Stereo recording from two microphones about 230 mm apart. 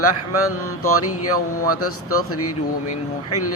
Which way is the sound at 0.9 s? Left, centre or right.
Left.